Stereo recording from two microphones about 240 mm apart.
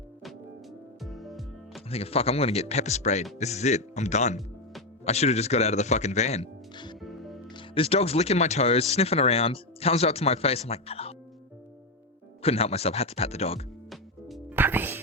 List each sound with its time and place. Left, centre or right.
1.0 s music: centre
1.9 s speech: left
7.0 s music: centre
7.5 s speech: left
12.4 s speech: left
13.9 s music: centre